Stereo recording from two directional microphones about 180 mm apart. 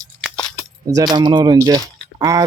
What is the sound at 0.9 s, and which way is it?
Speech, 25° right (ahead or behind).